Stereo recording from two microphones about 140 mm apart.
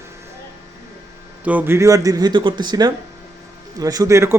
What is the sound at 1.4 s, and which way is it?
A man's voice, 15° right (ahead or behind).